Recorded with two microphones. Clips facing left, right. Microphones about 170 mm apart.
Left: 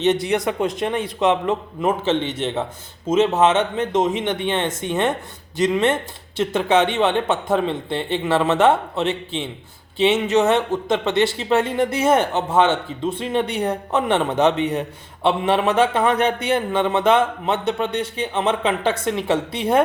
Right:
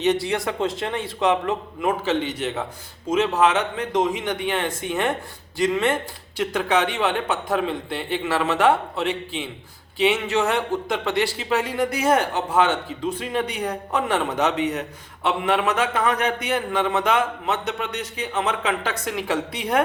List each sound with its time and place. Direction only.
0.0 s a man's voice: 20° left (ahead or behind)